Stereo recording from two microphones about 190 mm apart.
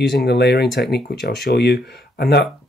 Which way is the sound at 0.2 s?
60° left (ahead or behind).